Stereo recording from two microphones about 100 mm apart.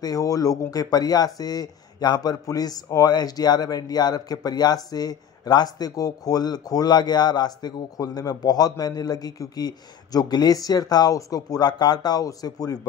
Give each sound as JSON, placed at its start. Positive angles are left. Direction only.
{"t": 0.0, "sound": "speech", "side_deg": 35}